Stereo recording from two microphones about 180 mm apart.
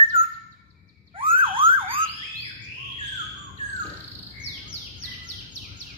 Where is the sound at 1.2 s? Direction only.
30° right (ahead or behind).